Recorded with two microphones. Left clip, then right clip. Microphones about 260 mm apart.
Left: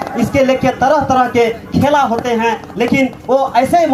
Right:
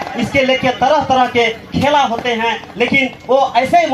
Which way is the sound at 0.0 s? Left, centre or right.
Right.